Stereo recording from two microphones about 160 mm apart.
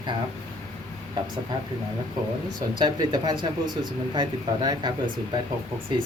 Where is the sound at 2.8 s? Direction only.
25° right (ahead or behind).